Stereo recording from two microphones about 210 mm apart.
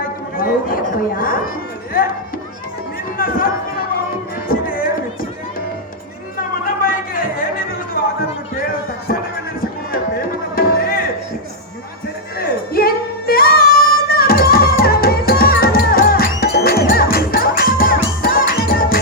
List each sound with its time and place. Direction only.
0.3 s a man's voice: 40° left (ahead or behind)
3.2 s speech: 40° left (ahead or behind)
4.4 s music: 40° left (ahead or behind)
8.0 s a sound: 45° left (ahead or behind)
9.9 s music: 45° left (ahead or behind)
12.7 s music: 45° left (ahead or behind)